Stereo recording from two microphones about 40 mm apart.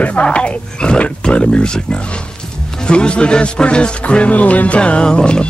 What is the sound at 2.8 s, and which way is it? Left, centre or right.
Music, left.